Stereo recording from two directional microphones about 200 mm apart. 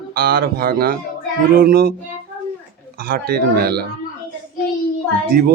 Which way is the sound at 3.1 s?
50° right (ahead or behind).